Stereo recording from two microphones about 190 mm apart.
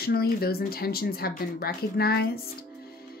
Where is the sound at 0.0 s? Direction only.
55° left (ahead or behind).